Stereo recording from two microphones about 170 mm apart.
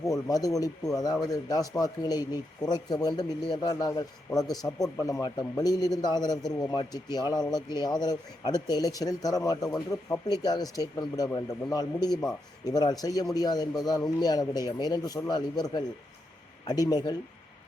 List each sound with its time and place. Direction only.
0.0 s speech: 20° left (ahead or behind)
16.9 s speech: 25° left (ahead or behind)